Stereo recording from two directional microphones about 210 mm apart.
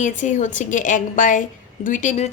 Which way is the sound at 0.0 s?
35° left (ahead or behind).